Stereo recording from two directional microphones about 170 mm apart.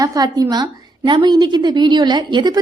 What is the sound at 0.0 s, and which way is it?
A woman's voice, 20° right (ahead or behind).